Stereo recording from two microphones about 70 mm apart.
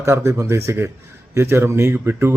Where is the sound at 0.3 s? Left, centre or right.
Right.